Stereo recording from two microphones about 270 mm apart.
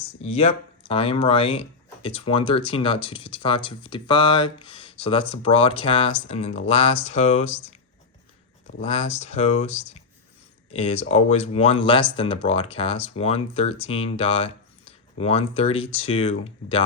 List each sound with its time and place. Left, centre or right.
0.2 s speech: left
8.8 s speech: left